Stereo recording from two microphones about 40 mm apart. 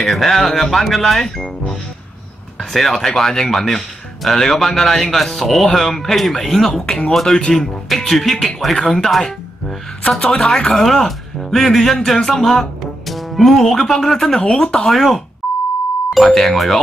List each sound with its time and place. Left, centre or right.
0.0 s speech: centre
2.7 s speech: centre
6.7 s speech: left
14.9 s speech: centre